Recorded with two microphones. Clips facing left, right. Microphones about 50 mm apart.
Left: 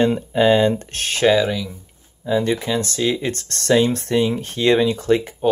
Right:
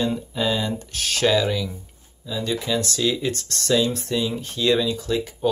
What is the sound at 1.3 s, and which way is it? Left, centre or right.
Speech, centre.